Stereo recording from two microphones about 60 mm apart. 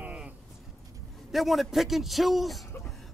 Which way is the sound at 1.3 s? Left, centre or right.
Centre.